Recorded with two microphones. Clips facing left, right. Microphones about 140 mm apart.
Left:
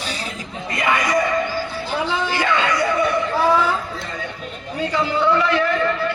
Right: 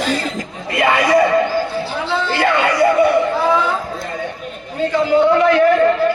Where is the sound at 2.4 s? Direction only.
60° right (ahead or behind).